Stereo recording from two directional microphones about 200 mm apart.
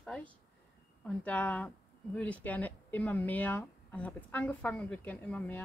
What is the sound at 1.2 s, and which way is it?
Speech, 5° left (ahead or behind).